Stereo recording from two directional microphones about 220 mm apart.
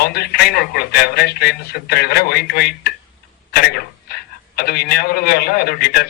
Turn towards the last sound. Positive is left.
turn(degrees=45)  # may be behind; listen again after turning